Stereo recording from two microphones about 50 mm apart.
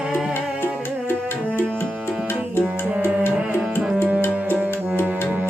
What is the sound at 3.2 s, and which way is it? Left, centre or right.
Music, left.